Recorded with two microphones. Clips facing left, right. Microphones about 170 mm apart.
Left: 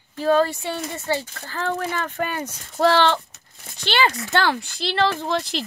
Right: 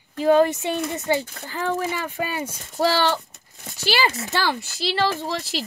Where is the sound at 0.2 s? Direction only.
15° right (ahead or behind).